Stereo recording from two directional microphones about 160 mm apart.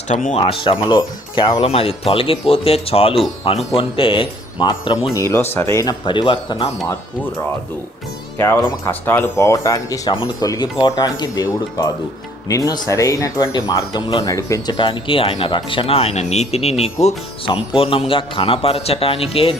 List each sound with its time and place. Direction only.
0.1 s speech: 50° left (ahead or behind)
0.3 s speech: 35° left (ahead or behind)
5.1 s speech: 20° left (ahead or behind); by 6.7 s 35° left (ahead or behind)
8.4 s speech: 15° left (ahead or behind); by 19.5 s 35° left (ahead or behind)